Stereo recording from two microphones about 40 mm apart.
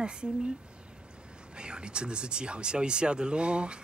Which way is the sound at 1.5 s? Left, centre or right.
Right.